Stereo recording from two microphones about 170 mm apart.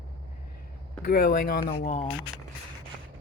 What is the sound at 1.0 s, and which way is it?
Speech, 65° left (ahead or behind).